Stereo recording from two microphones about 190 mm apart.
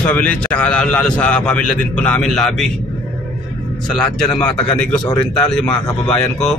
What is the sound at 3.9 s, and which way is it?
Speech, 5° left (ahead or behind).